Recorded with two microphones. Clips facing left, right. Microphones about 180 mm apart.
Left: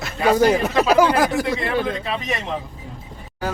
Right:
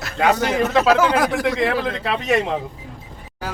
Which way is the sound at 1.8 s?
80° right.